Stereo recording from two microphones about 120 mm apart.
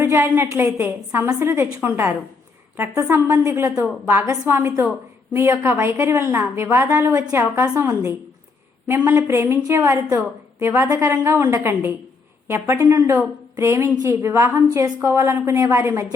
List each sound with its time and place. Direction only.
0.0 s a woman's voice: 20° right (ahead or behind)